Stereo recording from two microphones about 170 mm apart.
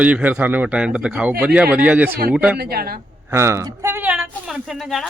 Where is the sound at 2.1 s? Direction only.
60° right (ahead or behind).